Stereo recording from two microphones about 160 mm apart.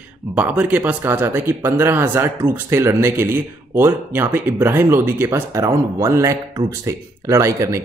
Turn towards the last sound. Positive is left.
turn(degrees=-20)  # may be behind; listen again after turning